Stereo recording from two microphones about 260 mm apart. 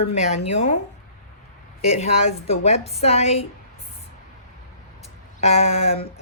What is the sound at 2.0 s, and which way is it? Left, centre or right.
Speech, left.